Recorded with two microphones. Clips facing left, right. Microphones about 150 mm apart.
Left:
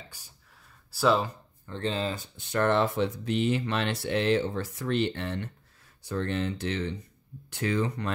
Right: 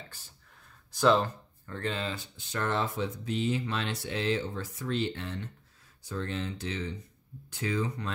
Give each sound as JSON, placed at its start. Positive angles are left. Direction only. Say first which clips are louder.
{"t": 0.1, "sound": "speech", "louder": "even", "side_deg": 10}
{"t": 1.7, "sound": "speech", "louder": "left 4 dB", "side_deg": 30}
{"t": 2.1, "sound": "speech", "louder": "left 7 dB", "side_deg": 55}